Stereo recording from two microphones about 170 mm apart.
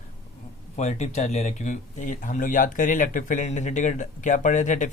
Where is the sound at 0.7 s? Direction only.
45° left (ahead or behind).